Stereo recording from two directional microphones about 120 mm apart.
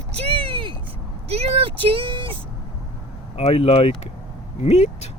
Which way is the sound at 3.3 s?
55° left (ahead or behind).